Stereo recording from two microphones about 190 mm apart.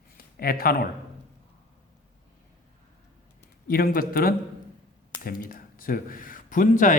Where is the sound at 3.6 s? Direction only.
50° left (ahead or behind).